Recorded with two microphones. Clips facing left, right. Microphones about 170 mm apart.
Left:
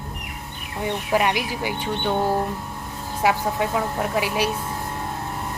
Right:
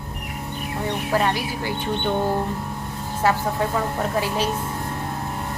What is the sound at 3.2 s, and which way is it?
A woman's voice, 10° left (ahead or behind).